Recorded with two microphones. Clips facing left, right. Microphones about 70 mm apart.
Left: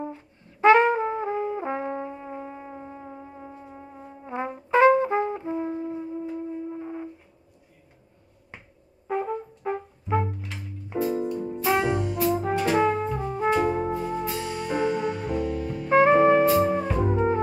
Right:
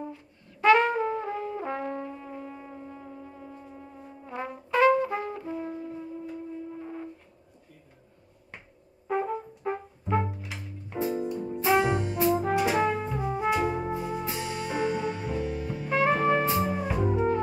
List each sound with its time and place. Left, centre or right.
0.0 s brass instrument: left
9.0 s brass instrument: centre
11.3 s music: centre
11.7 s brass instrument: centre
13.4 s music: centre
15.4 s music: centre
15.9 s music: left
16.5 s music: centre